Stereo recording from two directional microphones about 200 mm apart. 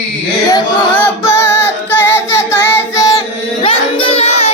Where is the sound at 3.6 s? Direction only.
25° left (ahead or behind).